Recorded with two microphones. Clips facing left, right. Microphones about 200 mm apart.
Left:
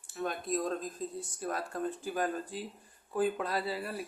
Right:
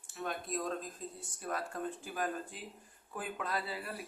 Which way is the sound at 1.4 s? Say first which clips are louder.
Left 3 dB; 35° left (ahead or behind).